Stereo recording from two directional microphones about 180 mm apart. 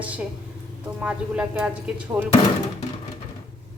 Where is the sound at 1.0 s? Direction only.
5° right (ahead or behind).